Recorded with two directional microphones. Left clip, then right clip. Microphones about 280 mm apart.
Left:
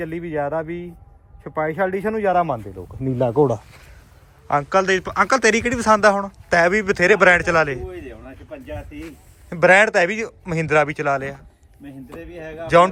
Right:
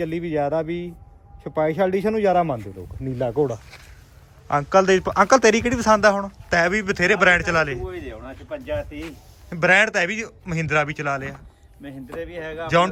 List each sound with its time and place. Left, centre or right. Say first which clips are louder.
0.0 s speech: right 1 dB; centre
3.0 s speech: left 5 dB; left
4.4 s a man's voice: even; centre